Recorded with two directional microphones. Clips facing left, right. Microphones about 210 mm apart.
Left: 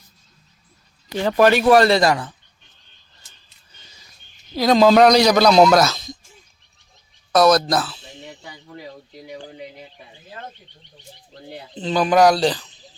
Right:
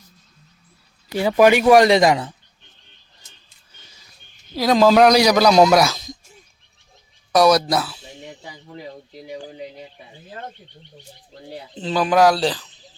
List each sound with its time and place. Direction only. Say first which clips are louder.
1.1 s a man's voice: right 1 dB; 10° right (ahead or behind)
4.5 s a man's voice: left 1 dB; 5° right (ahead or behind)
7.3 s speech: even; 10° right (ahead or behind)
8.3 s speech: right 1 dB; 20° right (ahead or behind)
11.5 s speech: left 1 dB; 5° right (ahead or behind)